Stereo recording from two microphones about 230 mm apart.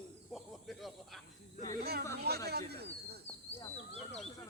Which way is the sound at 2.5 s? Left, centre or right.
Right.